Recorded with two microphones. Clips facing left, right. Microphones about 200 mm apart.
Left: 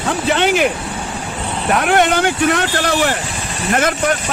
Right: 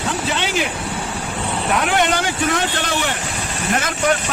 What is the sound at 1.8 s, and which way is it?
Speech, 55° left (ahead or behind).